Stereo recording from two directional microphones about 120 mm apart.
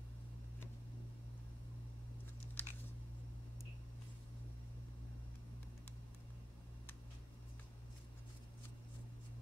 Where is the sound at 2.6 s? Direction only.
15° left (ahead or behind).